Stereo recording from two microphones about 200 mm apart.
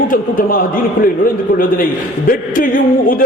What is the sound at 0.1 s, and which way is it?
Speech, 45° left (ahead or behind).